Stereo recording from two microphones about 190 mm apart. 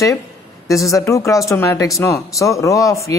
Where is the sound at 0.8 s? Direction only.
15° left (ahead or behind).